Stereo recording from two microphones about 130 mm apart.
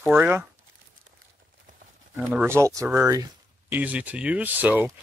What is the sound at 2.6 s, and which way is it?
Speech, 25° right (ahead or behind).